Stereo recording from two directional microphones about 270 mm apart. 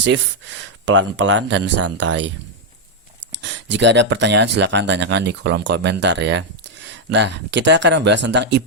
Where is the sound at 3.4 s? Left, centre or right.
Right.